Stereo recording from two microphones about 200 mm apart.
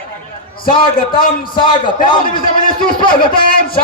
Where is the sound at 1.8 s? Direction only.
45° left (ahead or behind).